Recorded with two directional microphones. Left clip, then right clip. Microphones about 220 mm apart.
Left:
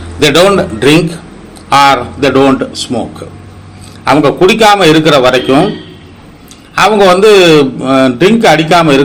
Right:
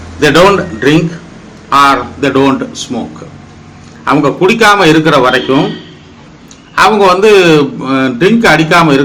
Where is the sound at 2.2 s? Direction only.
10° left (ahead or behind).